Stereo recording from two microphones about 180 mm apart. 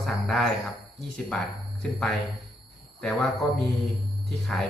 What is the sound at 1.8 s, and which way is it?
Speech, 5° left (ahead or behind).